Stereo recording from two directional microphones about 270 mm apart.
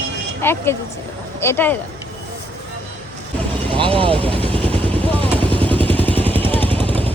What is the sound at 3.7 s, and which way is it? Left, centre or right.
Vehicle, centre.